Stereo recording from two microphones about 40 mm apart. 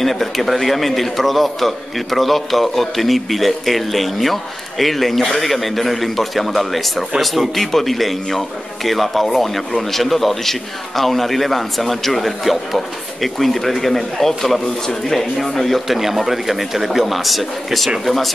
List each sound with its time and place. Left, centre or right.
0.0 s a man's voice: centre
16.0 s a man's voice: centre